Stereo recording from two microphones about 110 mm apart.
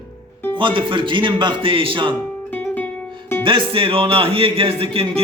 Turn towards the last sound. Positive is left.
turn(degrees=-60)  # may be behind; listen again after turning